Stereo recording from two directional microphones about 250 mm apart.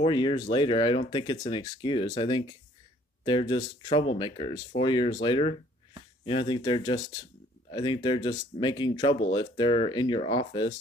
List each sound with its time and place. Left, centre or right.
0.0 s speech: centre